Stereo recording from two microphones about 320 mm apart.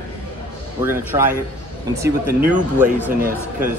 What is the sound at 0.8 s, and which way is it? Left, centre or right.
Speech, centre.